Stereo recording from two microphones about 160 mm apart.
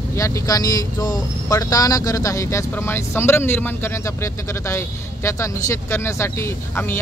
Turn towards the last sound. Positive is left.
turn(degrees=15)  # may be behind; listen again after turning